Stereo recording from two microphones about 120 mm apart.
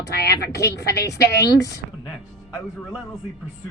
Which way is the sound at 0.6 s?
25° left (ahead or behind).